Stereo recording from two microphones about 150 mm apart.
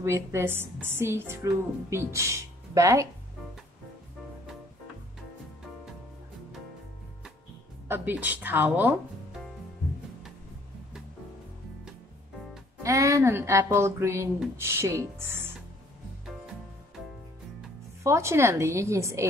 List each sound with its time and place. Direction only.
0.0 s a woman's voice: 20° right (ahead or behind)
7.9 s speech: 10° right (ahead or behind)
12.8 s speech: 20° right (ahead or behind)
18.0 s a woman's voice: 20° right (ahead or behind)